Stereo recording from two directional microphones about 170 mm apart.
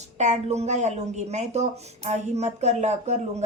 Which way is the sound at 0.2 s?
40° right (ahead or behind).